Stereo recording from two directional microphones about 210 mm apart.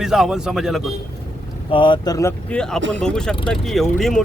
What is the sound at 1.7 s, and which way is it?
Speech, 25° left (ahead or behind).